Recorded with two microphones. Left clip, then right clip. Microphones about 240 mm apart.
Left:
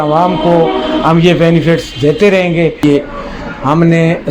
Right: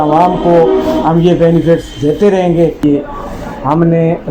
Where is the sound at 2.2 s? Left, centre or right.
Left.